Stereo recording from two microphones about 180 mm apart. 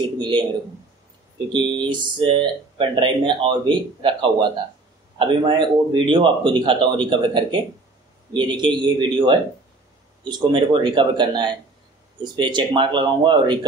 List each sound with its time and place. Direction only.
0.2 s speech: 25° right (ahead or behind)
1.5 s speech: 25° right (ahead or behind)